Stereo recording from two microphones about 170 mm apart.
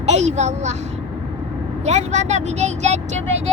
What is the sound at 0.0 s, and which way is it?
Speech, 40° right (ahead or behind).